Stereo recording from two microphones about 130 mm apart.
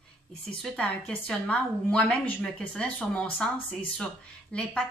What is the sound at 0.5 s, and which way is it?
A woman's voice, 10° left (ahead or behind).